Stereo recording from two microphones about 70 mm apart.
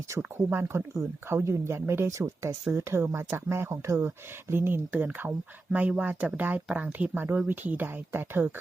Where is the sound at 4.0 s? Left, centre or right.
Right.